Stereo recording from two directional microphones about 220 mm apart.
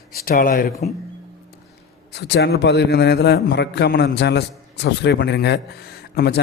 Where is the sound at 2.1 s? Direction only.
50° left (ahead or behind).